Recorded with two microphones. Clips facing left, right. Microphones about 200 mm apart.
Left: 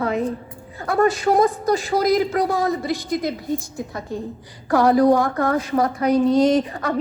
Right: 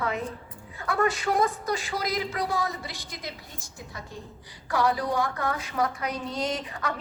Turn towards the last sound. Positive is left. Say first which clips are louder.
# left 12 dB
turn(degrees=35)  # may be behind; listen again after turning